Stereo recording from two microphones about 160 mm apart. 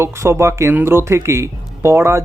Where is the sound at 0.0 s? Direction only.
15° right (ahead or behind).